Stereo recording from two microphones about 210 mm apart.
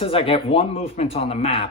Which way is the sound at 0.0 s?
25° left (ahead or behind).